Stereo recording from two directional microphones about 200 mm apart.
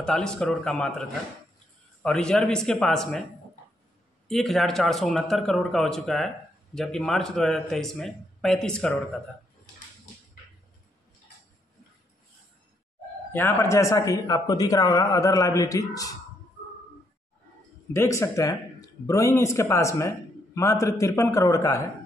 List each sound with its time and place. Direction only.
0.0 s a man's voice: 5° left (ahead or behind)
2.0 s a man's voice: 5° left (ahead or behind)
4.3 s a man's voice: centre (ahead or behind)
13.3 s speech: 15° left (ahead or behind)
17.9 s speech: 15° left (ahead or behind)